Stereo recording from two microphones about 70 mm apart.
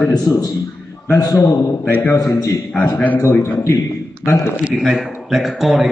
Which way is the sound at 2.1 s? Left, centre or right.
Left.